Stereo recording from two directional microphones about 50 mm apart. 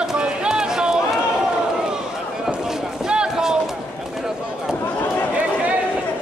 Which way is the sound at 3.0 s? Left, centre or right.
Centre.